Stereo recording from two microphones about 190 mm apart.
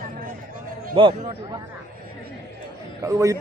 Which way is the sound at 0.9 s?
25° right (ahead or behind).